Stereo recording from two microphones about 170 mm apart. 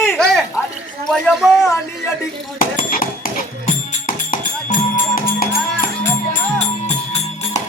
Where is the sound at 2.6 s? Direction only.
55° left (ahead or behind).